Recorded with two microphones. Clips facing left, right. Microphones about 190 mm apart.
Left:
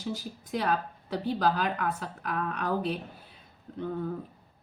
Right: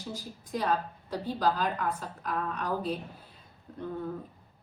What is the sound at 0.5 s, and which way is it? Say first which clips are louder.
A woman's voice: left 1 dB; 65° left (ahead or behind).